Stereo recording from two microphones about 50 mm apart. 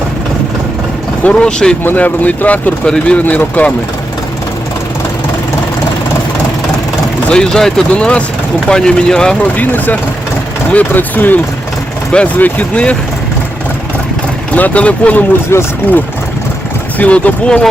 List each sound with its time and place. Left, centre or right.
1.2 s speech: left
2.0 s speech: left
2.8 s speech: centre
3.2 s speech: left
7.3 s speech: centre
9.4 s speech: left
12.4 s speech: left
14.5 s speech: left
15.5 s speech: left
17.0 s speech: left